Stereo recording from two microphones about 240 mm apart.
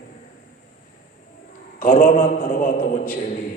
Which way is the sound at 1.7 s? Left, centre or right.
Left.